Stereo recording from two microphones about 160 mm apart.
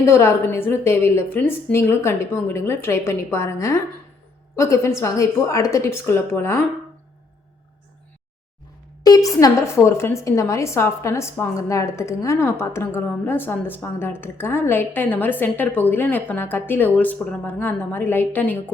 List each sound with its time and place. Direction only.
0.0 s a woman's voice: 15° left (ahead or behind)
9.0 s a woman's voice: 20° left (ahead or behind)